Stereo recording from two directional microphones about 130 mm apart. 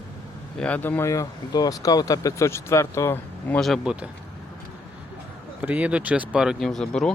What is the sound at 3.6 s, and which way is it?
Speech, centre (ahead or behind).